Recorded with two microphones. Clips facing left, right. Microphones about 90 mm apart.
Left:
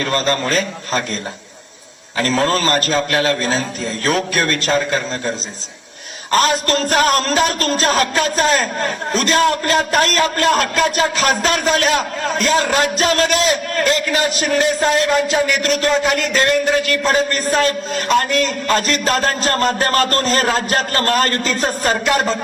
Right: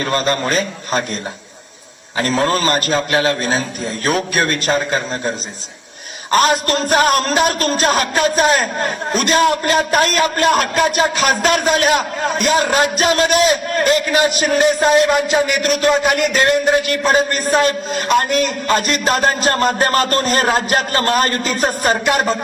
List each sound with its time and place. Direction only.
0.0 s a man's voice: 15° right (ahead or behind)
2.1 s a man's voice: 15° right (ahead or behind)
6.3 s a man's voice: 20° right (ahead or behind)